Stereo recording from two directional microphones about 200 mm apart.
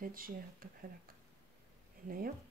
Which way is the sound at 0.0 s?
45° right (ahead or behind).